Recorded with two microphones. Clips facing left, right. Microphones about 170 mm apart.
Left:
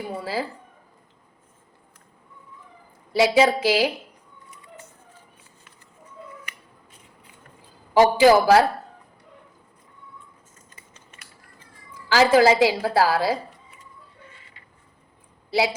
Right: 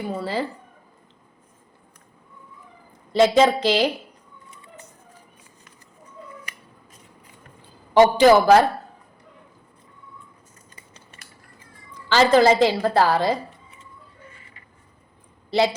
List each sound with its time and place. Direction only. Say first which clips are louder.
0.1 s a woman's voice: right 2 dB; 10° left (ahead or behind)
3.1 s a woman's voice: right 2 dB; 10° left (ahead or behind)
4.5 s a sound: left 1 dB; 25° right (ahead or behind)
7.9 s a woman's voice: right 1 dB; 5° left (ahead or behind)
10.8 s cutlery: right 2 dB; 35° right (ahead or behind)
11.9 s a woman's voice: right 1 dB; 10° left (ahead or behind)
15.4 s speech: right 3 dB; 10° left (ahead or behind)